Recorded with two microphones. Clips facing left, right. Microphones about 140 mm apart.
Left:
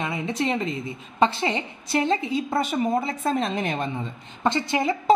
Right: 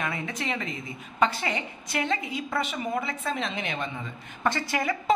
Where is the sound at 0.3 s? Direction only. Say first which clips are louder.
Left 7 dB; 30° left (ahead or behind).